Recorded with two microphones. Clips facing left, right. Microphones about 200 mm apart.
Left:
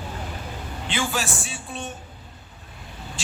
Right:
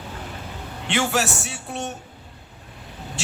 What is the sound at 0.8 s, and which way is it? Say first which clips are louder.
A man's voice: right 5 dB; 70° right (ahead or behind).